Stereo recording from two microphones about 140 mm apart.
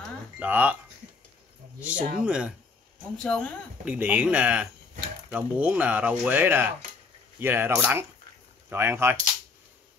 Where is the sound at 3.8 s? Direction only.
10° right (ahead or behind).